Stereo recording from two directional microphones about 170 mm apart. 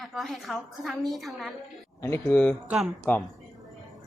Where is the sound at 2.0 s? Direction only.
15° left (ahead or behind).